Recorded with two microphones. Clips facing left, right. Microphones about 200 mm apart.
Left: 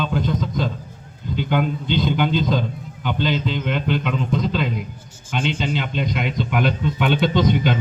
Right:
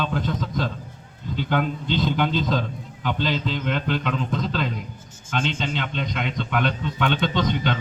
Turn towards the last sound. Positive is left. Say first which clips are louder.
# left 5 dB
turn(degrees=10)  # may be behind; listen again after turning